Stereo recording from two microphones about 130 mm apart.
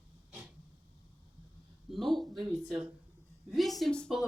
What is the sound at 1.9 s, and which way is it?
Speech, centre (ahead or behind).